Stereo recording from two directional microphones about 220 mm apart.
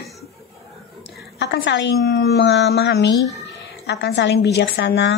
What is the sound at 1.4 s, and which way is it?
Speech, 50° left (ahead or behind).